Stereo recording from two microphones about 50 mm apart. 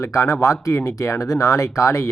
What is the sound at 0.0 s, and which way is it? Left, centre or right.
Speech, left.